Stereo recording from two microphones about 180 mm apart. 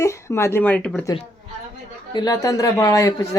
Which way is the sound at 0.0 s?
15° left (ahead or behind).